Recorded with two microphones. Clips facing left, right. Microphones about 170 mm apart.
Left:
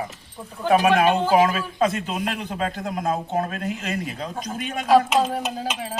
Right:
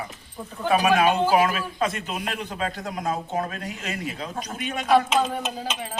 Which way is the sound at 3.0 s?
50° left (ahead or behind).